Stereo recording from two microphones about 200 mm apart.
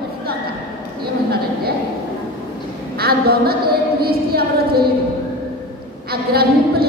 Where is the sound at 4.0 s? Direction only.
50° right (ahead or behind).